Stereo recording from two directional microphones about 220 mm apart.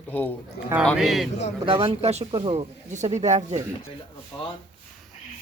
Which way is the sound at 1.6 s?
25° right (ahead or behind).